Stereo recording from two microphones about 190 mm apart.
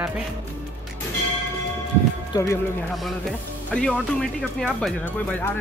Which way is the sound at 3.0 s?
Centre (ahead or behind).